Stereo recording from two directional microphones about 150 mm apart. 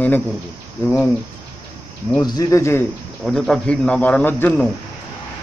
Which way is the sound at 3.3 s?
Centre (ahead or behind).